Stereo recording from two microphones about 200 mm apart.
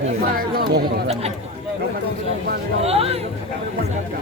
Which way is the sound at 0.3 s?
50° right (ahead or behind).